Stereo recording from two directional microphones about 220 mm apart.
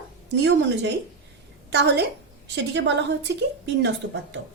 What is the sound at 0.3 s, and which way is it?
A woman's voice, 55° right (ahead or behind).